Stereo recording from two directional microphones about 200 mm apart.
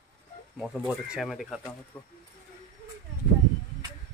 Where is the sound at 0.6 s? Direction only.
5° right (ahead or behind).